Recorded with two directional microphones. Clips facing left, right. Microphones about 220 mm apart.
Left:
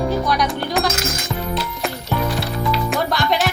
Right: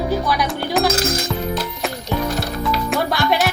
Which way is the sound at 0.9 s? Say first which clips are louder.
Right 5 dB; 35° right (ahead or behind).